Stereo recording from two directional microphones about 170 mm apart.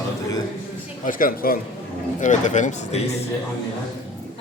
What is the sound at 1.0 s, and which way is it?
Speech, 60° left (ahead or behind).